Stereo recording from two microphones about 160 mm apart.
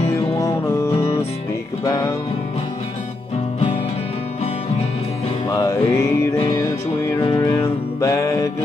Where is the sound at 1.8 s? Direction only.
25° left (ahead or behind).